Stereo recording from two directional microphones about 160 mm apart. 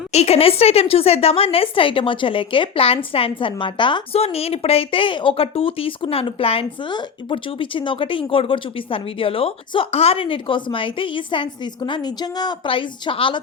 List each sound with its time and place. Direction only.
0.1 s a woman's voice: 40° left (ahead or behind)